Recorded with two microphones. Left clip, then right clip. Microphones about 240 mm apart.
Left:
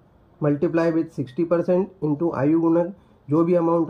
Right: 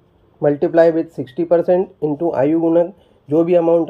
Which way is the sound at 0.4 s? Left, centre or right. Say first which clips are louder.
Right 9 dB; centre.